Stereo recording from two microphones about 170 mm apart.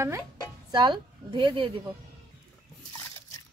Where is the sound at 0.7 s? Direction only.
25° right (ahead or behind).